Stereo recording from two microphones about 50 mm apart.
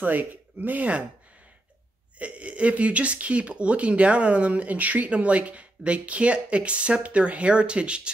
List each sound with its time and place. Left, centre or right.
0.0 s speech: right
2.1 s speech: right